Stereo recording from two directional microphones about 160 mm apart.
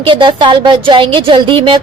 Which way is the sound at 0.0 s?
30° right (ahead or behind).